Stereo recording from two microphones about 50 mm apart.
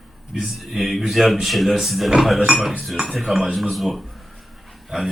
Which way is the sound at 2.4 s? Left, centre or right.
Centre.